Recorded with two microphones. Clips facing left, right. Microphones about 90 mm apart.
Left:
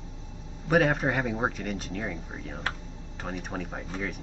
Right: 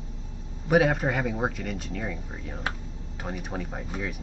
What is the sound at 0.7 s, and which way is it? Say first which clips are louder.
Speech: right 1 dB; centre (ahead or behind).